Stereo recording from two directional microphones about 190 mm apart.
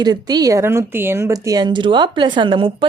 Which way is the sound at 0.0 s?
20° right (ahead or behind).